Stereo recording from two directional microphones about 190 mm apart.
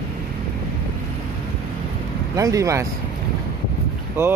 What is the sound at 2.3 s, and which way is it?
Speech, 15° right (ahead or behind).